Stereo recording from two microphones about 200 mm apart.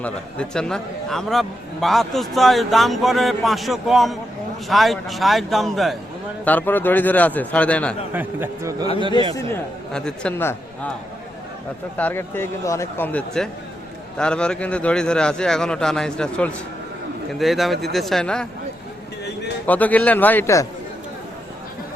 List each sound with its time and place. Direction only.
0.0 s a man's voice: 5° left (ahead or behind)
8.1 s a man's voice: 10° right (ahead or behind)
9.9 s a man's voice: 5° left (ahead or behind)
11.9 s a man's voice: 10° left (ahead or behind)
19.6 s speech: 10° left (ahead or behind)